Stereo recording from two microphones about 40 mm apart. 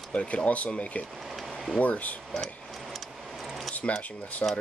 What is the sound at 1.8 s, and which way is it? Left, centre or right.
Speech, left.